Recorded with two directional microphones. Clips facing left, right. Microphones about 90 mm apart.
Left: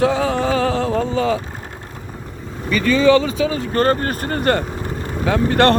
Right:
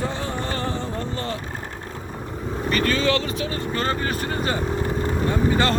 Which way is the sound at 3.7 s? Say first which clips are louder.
Left 6 dB; 45° left (ahead or behind).